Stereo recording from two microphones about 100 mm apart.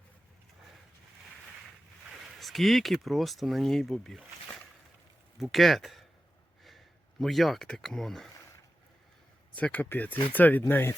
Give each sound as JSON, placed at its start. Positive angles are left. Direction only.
{"t": 2.0, "sound": "speech", "side_deg": 0}
{"t": 5.4, "sound": "speech", "side_deg": 0}
{"t": 9.6, "sound": "speech", "side_deg": 15}